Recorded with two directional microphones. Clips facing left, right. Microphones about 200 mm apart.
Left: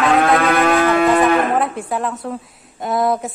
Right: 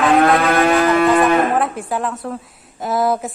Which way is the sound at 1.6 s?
Centre (ahead or behind).